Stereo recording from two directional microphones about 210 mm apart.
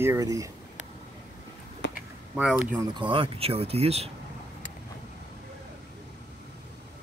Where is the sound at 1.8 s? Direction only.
60° left (ahead or behind).